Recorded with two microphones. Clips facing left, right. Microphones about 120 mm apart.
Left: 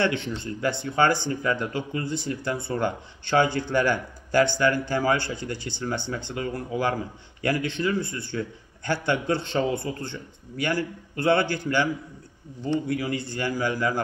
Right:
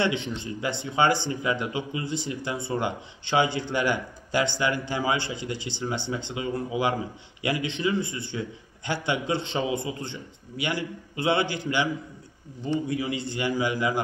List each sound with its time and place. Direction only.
0.0 s a man's voice: 20° right (ahead or behind)